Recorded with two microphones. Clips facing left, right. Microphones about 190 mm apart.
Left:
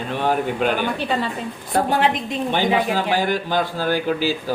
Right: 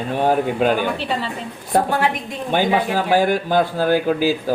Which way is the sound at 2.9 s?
50° right (ahead or behind).